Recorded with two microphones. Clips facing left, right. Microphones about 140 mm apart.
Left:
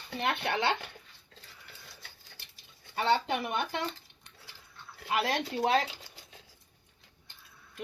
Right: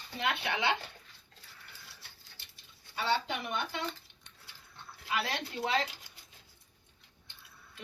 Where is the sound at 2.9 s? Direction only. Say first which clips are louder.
Left 4 dB; 50° left (ahead or behind).